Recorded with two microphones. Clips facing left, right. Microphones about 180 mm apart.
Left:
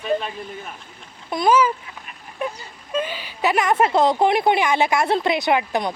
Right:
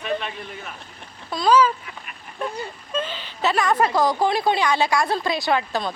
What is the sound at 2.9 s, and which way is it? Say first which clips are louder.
Speech: left 3 dB; 10° left (ahead or behind).